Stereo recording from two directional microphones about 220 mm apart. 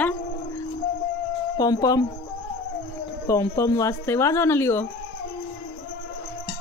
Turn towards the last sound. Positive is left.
turn(degrees=10)  # may be behind; listen again after turning